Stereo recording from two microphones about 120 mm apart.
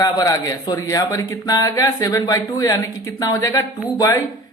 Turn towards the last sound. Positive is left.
turn(degrees=30)  # may be behind; listen again after turning